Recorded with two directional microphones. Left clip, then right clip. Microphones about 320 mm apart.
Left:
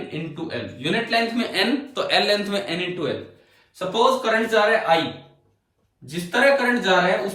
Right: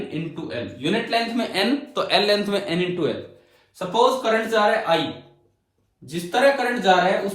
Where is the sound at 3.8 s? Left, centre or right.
Centre.